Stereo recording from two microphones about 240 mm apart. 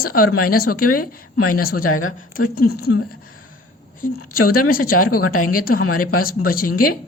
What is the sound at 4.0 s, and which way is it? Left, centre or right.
A woman's voice, left.